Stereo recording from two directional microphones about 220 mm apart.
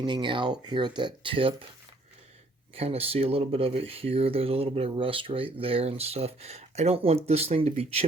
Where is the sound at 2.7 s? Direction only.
25° right (ahead or behind).